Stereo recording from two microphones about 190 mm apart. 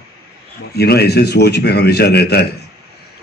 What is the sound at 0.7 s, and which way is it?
A man's voice, 55° left (ahead or behind).